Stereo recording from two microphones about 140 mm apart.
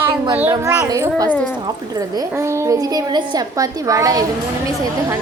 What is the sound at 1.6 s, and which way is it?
A woman's voice, 25° right (ahead or behind).